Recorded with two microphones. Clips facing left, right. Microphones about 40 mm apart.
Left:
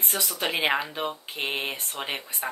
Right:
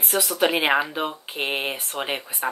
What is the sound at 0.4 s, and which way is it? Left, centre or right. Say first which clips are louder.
Speech: right 5 dB; centre.